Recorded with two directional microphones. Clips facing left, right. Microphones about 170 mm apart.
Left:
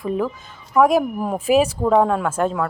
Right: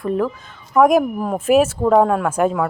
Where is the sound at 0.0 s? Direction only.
Centre (ahead or behind).